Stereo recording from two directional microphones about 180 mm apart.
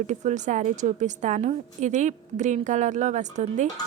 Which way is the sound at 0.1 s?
40° right (ahead or behind).